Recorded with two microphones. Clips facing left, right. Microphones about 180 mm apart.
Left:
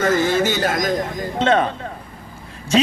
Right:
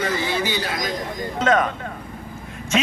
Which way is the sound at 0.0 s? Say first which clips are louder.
Left 6 dB; 45° left (ahead or behind).